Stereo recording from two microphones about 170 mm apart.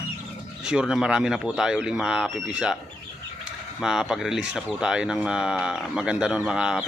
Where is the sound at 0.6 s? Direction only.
5° right (ahead or behind).